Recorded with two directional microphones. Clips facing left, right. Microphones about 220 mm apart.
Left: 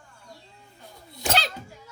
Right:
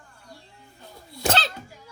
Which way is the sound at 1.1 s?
10° left (ahead or behind).